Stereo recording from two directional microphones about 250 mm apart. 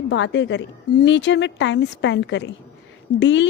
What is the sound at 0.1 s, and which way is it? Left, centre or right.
Speech, left.